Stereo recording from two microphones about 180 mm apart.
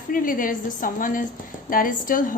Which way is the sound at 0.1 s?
50° left (ahead or behind).